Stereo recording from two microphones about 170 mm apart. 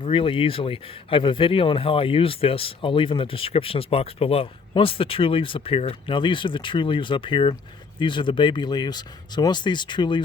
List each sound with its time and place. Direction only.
0.0 s speech: 30° left (ahead or behind)